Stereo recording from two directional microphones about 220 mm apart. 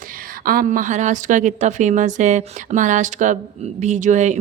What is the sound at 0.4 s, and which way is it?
A woman's voice, 40° right (ahead or behind).